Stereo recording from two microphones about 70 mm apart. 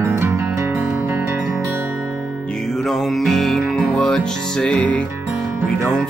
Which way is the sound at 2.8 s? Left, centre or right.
Centre.